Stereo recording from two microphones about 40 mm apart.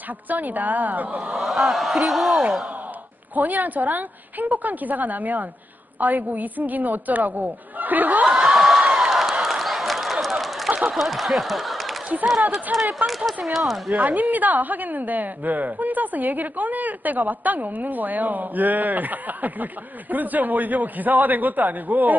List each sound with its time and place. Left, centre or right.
0.3 s a woman's voice: right
1.4 s a man's voice: centre
3.3 s a woman's voice: right
8.4 s a sound: centre
11.0 s speech: centre
12.7 s a woman's voice: right
13.0 s a man's voice: centre
13.9 s a woman's voice: right